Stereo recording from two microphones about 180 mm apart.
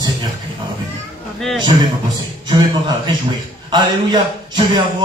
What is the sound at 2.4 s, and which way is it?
Speech, 25° right (ahead or behind).